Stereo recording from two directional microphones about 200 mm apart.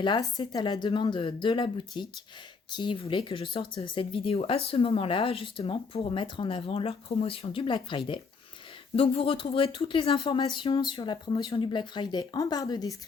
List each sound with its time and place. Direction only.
0.0 s speech: 20° left (ahead or behind)